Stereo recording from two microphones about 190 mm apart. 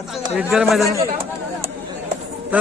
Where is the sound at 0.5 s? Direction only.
Centre (ahead or behind).